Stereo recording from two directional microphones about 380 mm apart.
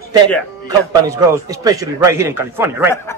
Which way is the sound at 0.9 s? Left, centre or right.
Centre.